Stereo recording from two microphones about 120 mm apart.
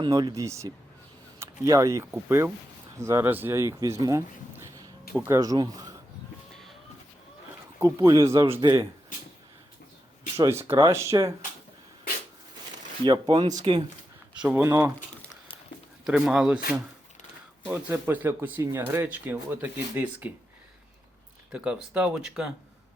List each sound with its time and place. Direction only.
0.1 s speech: 30° right (ahead or behind)
6.5 s a sound: centre (ahead or behind)
7.8 s speech: 25° right (ahead or behind)
10.3 s speech: 20° right (ahead or behind)
13.0 s speech: 35° right (ahead or behind)
14.3 s speech: 10° right (ahead or behind)
14.6 s speech: 20° right (ahead or behind)
16.0 s speech: 5° right (ahead or behind)
17.7 s speech: 20° right (ahead or behind)
21.5 s speech: 10° right (ahead or behind)